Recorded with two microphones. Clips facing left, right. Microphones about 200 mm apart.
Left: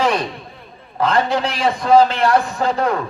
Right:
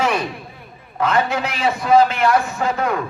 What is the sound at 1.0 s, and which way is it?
A man's voice, 30° left (ahead or behind).